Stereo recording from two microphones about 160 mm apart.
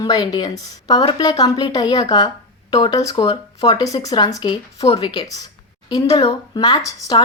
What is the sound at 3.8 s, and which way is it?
A woman's voice, 20° left (ahead or behind).